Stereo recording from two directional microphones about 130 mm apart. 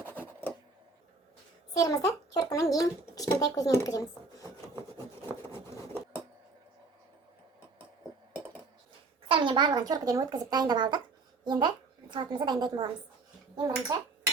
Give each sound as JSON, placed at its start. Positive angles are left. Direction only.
{"t": 0.0, "sound": "a sound", "side_deg": 10}
{"t": 1.7, "sound": "a child's voice", "side_deg": 30}
{"t": 4.4, "sound": "filing", "side_deg": 20}
{"t": 9.3, "sound": "speech", "side_deg": -40}